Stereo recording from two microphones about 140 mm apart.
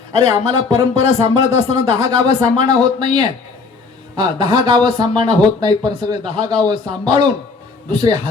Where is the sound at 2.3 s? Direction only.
30° right (ahead or behind).